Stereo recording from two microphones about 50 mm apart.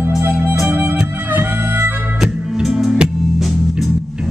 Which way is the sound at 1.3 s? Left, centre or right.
Right.